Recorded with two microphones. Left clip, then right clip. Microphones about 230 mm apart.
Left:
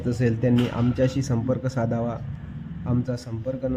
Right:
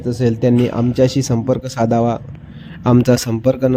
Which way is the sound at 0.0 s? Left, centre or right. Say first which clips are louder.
Right 8 dB; centre.